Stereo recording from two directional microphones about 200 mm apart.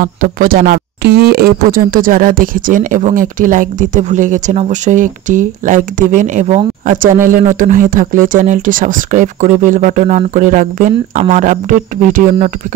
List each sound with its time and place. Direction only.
0.0 s speech: 45° right (ahead or behind)